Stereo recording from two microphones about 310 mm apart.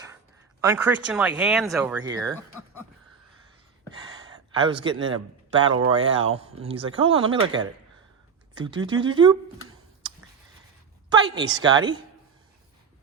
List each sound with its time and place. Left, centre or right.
0.6 s speech: centre
4.6 s speech: centre
11.3 s speech: centre